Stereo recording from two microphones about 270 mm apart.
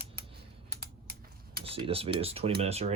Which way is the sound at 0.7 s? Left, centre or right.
Right.